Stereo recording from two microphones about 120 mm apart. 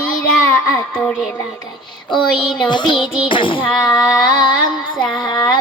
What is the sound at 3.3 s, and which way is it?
Speech, 45° left (ahead or behind).